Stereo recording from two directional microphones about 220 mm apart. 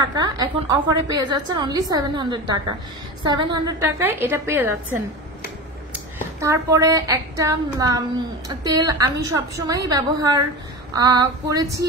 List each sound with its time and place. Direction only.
0.0 s a woman's voice: 20° right (ahead or behind)
3.6 s a woman's voice: 10° right (ahead or behind)
5.9 s a woman's voice: 15° right (ahead or behind)